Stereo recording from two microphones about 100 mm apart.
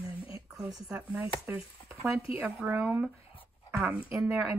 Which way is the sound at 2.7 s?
20° right (ahead or behind).